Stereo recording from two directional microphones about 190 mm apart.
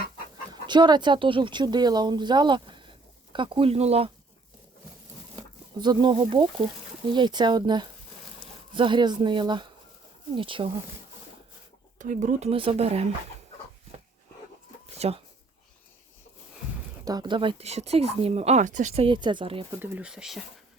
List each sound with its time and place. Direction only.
0.5 s speech: 25° right (ahead or behind)
5.8 s speech: 25° right (ahead or behind)
11.9 s speech: 40° right (ahead or behind)
14.9 s speech: 35° right (ahead or behind)
17.1 s speech: 20° right (ahead or behind)
19.8 s speech: 10° right (ahead or behind)